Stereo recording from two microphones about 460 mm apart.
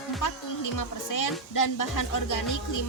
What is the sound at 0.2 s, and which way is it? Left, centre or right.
Speech, left.